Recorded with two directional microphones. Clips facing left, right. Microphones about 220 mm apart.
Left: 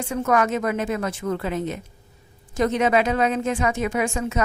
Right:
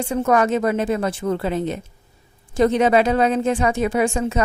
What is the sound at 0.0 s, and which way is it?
A woman's voice, 30° right (ahead or behind).